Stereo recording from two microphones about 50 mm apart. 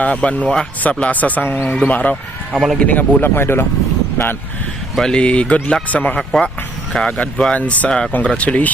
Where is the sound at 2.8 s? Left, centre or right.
Left.